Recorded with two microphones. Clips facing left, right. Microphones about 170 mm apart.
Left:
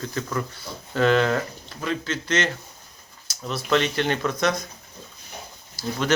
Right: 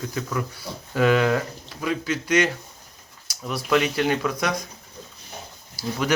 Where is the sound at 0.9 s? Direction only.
10° right (ahead or behind).